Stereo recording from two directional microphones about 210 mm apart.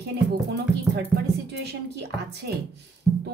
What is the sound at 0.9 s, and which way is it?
Speech, 50° right (ahead or behind).